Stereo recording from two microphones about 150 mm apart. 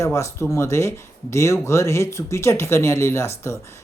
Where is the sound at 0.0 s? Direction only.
20° left (ahead or behind).